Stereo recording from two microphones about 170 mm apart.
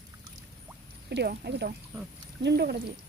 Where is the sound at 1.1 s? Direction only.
75° right (ahead or behind).